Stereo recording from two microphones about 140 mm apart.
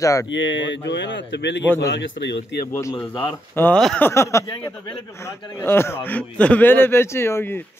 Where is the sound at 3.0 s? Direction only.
35° left (ahead or behind).